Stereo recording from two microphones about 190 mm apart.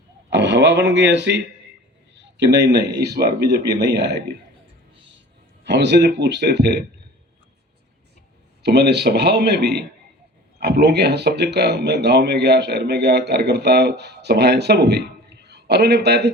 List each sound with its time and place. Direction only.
0.3 s speech: 65° right (ahead or behind)
5.6 s speech: 65° right (ahead or behind)
8.6 s speech: 60° right (ahead or behind)